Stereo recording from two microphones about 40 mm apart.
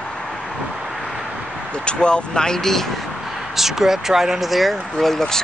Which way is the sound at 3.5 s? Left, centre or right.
Centre.